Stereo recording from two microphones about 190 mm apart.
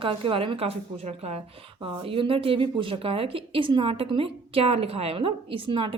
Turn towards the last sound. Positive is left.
turn(degrees=-25)  # may be behind; listen again after turning